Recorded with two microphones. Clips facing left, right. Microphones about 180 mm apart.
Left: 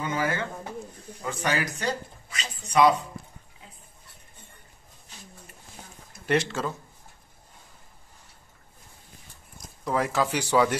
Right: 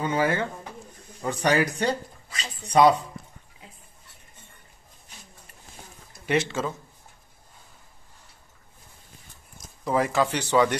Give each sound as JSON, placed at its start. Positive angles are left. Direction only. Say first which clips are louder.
{"t": 0.0, "sound": "speech", "louder": "right 4 dB", "side_deg": -35}
{"t": 6.2, "sound": "speech", "louder": "even", "side_deg": 0}
{"t": 9.6, "sound": "speech", "louder": "right 2 dB", "side_deg": 0}